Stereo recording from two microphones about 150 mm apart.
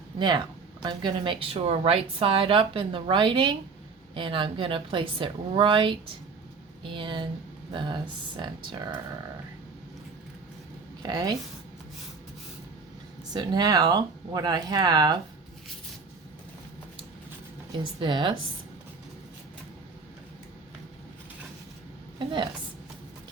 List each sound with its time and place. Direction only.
0.2 s speech: 30° right (ahead or behind)
11.0 s speech: 25° right (ahead or behind)
13.3 s speech: 25° right (ahead or behind)
18.0 s speech: 35° right (ahead or behind)